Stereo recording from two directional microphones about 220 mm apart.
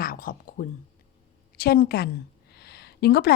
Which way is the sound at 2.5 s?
45° left (ahead or behind).